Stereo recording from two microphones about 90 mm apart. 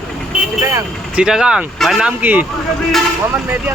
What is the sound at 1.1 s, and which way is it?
Speech, 10° right (ahead or behind).